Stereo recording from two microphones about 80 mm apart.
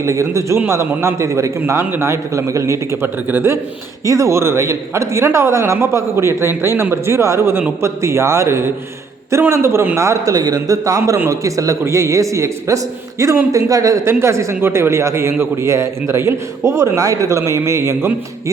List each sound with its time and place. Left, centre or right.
0.0 s a man's voice: right
4.0 s a man's voice: right
10.3 s a man's voice: right